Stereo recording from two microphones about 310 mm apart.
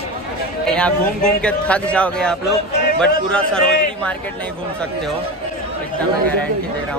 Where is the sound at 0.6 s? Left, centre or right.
Centre.